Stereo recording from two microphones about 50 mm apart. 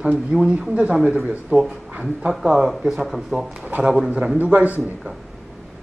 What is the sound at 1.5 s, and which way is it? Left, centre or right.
Speech, right.